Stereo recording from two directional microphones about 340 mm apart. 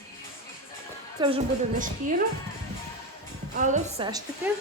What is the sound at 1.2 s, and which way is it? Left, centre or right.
Speech, centre.